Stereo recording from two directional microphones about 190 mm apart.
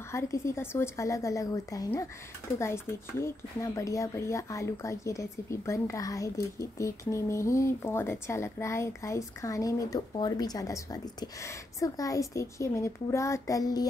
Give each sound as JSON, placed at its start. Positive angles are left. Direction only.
{"t": 0.1, "sound": "speech", "side_deg": 15}